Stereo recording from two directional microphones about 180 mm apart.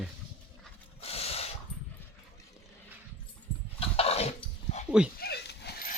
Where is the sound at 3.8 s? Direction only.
35° left (ahead or behind).